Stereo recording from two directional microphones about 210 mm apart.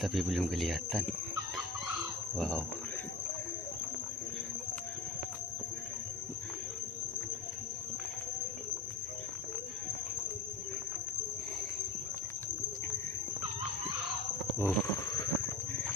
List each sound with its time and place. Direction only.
0.0 s speech: centre (ahead or behind)
2.3 s speech: 5° left (ahead or behind)
14.6 s a sound: 15° left (ahead or behind)